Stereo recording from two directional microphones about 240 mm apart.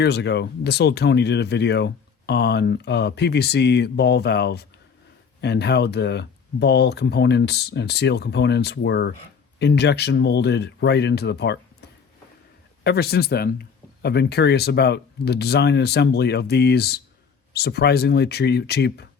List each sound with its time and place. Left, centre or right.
0.0 s speech: left
12.8 s speech: left